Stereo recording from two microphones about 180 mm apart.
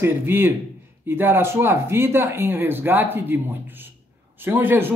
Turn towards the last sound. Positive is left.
turn(degrees=-10)  # may be behind; listen again after turning